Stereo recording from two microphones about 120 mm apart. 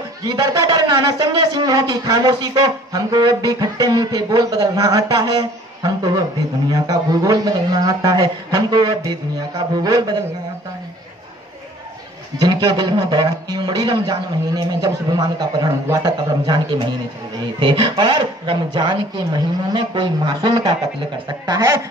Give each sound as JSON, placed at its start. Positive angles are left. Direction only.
{"t": 0.2, "sound": "speech", "side_deg": -30}
{"t": 12.4, "sound": "speech", "side_deg": -35}